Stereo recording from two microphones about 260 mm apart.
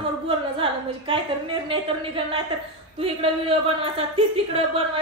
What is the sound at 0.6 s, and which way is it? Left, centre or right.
A woman's voice, right.